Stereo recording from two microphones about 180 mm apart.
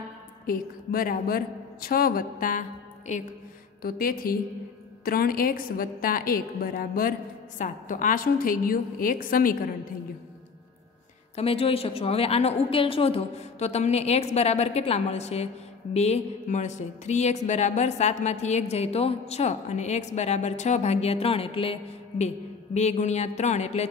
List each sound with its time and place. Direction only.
0.5 s a woman's voice: 55° left (ahead or behind)
3.8 s a woman's voice: 55° left (ahead or behind)
11.3 s speech: 30° left (ahead or behind)
22.8 s speech: 40° left (ahead or behind)